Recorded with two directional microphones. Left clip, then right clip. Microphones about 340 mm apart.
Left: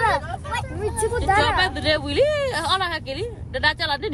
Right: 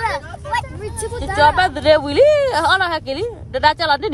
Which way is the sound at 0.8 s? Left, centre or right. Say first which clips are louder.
Left 3 dB; centre.